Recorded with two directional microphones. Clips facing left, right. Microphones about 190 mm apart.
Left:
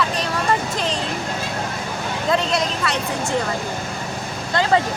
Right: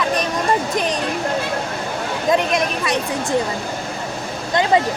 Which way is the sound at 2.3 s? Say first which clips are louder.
Right 2 dB; 15° right (ahead or behind).